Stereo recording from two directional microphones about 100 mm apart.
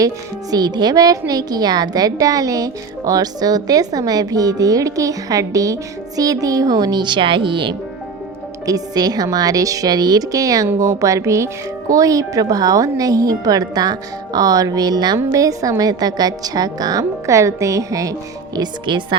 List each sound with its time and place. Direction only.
0.5 s a woman's voice: 45° right (ahead or behind)
8.6 s a woman's voice: 40° right (ahead or behind)
18.5 s speech: 50° right (ahead or behind)